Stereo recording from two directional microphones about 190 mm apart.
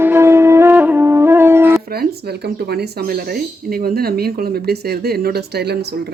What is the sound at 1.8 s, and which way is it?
Speech, 55° right (ahead or behind).